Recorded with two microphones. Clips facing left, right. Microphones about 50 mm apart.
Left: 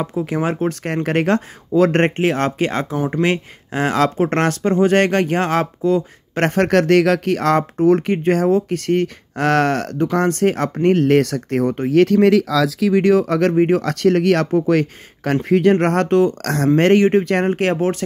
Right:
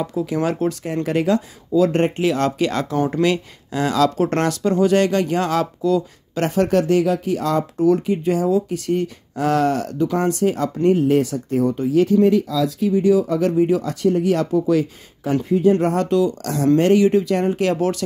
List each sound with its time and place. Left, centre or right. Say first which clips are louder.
0.0 s speech: left 1 dB; left
1.0 s speech: left 1 dB; left
6.4 s speech: left 2 dB; left
15.4 s speech: left 2 dB; left